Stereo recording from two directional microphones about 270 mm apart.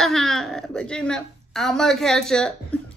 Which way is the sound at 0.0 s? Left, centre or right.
Centre.